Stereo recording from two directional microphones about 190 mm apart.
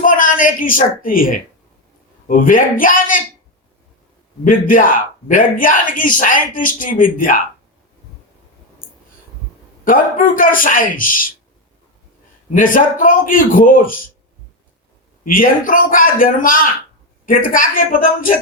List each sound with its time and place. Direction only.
0.0 s a woman's voice: 45° left (ahead or behind)
4.4 s speech: 45° left (ahead or behind)
9.8 s speech: 45° left (ahead or behind)
12.5 s speech: 45° left (ahead or behind)
15.3 s speech: 45° left (ahead or behind)